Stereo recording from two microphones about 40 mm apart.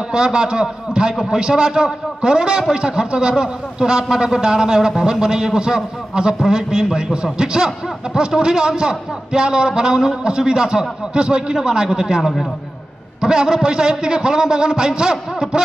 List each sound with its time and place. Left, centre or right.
0.1 s a man's voice: right
12.2 s a man's voice: centre
13.2 s a man's voice: centre